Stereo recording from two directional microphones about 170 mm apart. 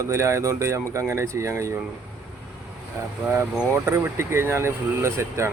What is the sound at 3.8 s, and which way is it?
Speech, 15° right (ahead or behind).